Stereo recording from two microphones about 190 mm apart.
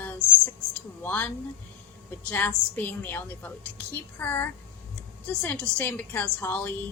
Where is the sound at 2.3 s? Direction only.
10° left (ahead or behind).